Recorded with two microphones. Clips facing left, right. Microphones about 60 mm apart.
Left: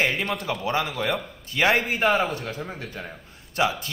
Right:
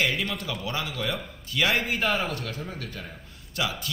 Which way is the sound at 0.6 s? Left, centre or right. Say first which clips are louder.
Left 5 dB; left.